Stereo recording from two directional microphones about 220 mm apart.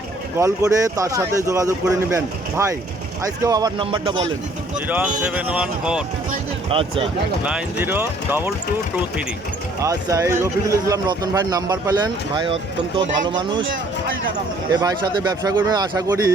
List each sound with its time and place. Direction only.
0.3 s speech: 15° right (ahead or behind)
4.9 s speech: 5° right (ahead or behind)
6.7 s speech: 25° right (ahead or behind)
7.4 s speech: 5° right (ahead or behind)
9.8 s speech: 15° right (ahead or behind)
14.7 s speech: 15° right (ahead or behind)